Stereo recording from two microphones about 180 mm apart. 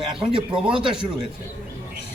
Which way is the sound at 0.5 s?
5° right (ahead or behind).